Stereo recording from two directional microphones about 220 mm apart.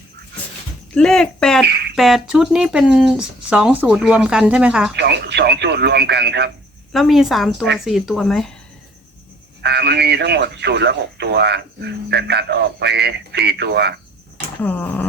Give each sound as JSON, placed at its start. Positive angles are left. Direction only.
{"t": 0.9, "sound": "speech", "side_deg": 5}
{"t": 4.9, "sound": "speech", "side_deg": -50}
{"t": 6.9, "sound": "speech", "side_deg": 0}
{"t": 9.6, "sound": "speech", "side_deg": -50}
{"t": 14.6, "sound": "a sound", "side_deg": 10}